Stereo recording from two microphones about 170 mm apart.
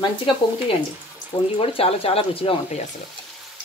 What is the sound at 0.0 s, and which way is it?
Speech, 30° left (ahead or behind).